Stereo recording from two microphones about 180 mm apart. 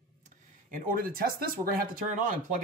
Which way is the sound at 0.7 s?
50° right (ahead or behind).